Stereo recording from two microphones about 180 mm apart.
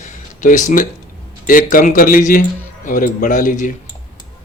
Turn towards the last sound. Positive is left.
turn(degrees=45)  # may be behind; listen again after turning